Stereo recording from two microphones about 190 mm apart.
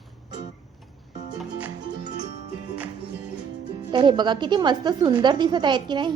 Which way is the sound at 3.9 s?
25° right (ahead or behind).